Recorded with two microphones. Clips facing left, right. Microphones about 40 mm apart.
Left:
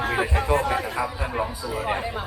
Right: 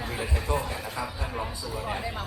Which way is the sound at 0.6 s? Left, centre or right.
Left.